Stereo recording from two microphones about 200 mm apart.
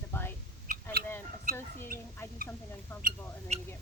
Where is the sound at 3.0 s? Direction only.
35° right (ahead or behind).